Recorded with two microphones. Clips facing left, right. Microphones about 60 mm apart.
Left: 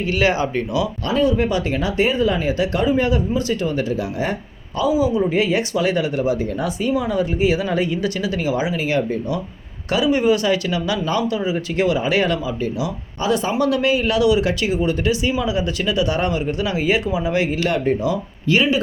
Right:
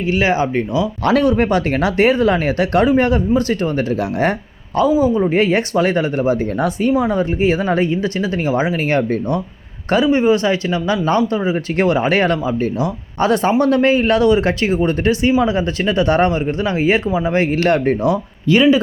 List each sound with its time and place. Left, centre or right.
0.0 s speech: right
1.0 s speech: right
9.9 s speech: right